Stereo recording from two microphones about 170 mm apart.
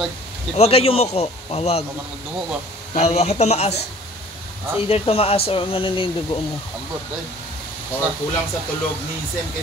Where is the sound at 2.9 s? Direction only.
40° left (ahead or behind).